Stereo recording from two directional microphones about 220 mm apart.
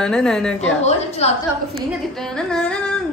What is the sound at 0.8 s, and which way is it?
Speech, 30° left (ahead or behind).